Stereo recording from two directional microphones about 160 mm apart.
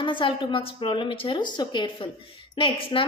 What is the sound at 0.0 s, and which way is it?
A woman's voice, 30° left (ahead or behind).